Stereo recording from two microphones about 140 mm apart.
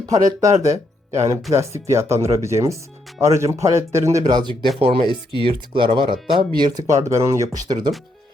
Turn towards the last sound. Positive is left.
turn(degrees=-25)  # may be behind; listen again after turning